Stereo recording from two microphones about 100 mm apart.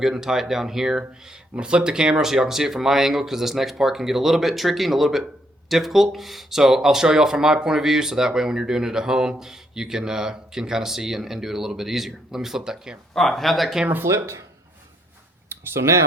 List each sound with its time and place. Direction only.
0.0 s speech: 5° right (ahead or behind)
13.8 s speech: 20° right (ahead or behind)
15.4 s speech: 25° right (ahead or behind)